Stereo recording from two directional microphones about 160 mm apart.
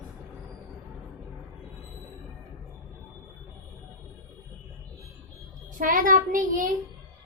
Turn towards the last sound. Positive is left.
turn(degrees=-55)  # may be behind; listen again after turning